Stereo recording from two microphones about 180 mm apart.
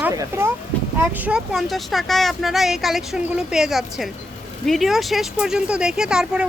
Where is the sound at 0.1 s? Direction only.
15° right (ahead or behind).